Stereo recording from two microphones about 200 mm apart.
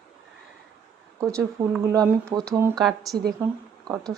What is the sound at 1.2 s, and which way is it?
Speech, 15° right (ahead or behind).